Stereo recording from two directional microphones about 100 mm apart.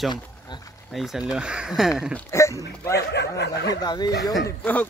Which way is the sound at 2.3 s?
25° left (ahead or behind).